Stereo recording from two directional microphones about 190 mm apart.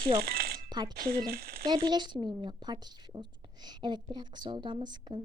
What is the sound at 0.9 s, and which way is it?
Speech, 50° right (ahead or behind).